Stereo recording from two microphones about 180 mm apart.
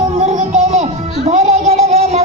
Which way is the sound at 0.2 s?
35° right (ahead or behind).